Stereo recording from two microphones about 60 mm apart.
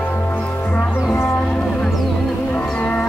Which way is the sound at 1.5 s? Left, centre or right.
Centre.